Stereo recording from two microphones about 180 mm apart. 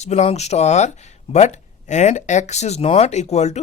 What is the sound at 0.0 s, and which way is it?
Speech, 40° left (ahead or behind).